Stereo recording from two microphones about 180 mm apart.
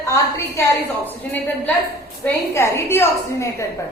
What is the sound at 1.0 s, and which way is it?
A woman's voice, 10° left (ahead or behind).